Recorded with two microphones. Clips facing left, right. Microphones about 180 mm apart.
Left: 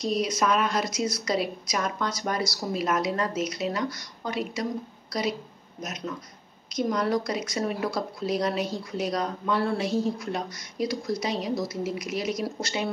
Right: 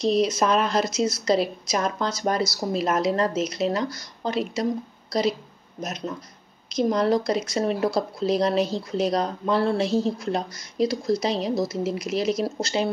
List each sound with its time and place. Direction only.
0.0 s speech: 30° right (ahead or behind)
5.9 s speech: 30° right (ahead or behind)